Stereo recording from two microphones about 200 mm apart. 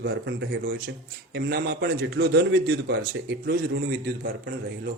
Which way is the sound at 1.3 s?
55° right (ahead or behind).